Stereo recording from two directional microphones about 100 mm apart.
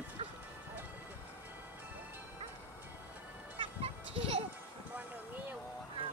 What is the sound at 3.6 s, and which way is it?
Music, 70° right (ahead or behind).